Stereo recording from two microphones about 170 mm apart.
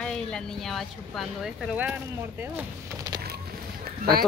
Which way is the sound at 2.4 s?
10° right (ahead or behind).